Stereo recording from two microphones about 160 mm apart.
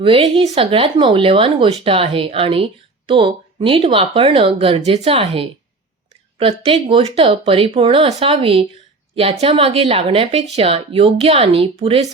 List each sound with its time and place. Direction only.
0.0 s speech: 35° right (ahead or behind)